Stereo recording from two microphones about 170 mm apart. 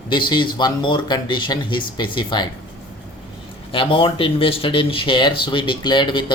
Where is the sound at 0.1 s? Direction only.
25° left (ahead or behind).